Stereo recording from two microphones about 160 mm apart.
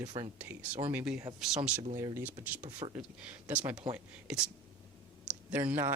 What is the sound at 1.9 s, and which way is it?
Speech, 20° right (ahead or behind).